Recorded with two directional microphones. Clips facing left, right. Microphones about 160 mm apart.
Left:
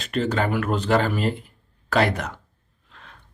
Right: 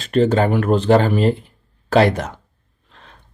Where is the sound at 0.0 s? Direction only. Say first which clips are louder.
Right 8 dB; 35° right (ahead or behind).